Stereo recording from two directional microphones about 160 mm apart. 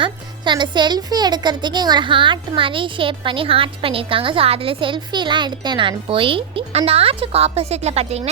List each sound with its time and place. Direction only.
0.0 s a woman's voice: 30° right (ahead or behind)